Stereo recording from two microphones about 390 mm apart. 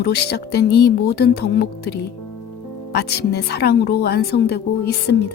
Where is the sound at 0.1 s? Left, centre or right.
Left.